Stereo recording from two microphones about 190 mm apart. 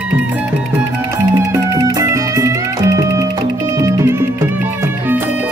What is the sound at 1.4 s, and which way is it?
Music, 15° right (ahead or behind).